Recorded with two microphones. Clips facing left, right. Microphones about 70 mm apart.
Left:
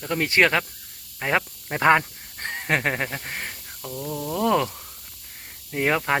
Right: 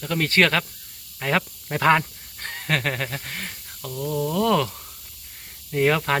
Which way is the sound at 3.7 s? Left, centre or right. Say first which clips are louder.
Right 5 dB; centre.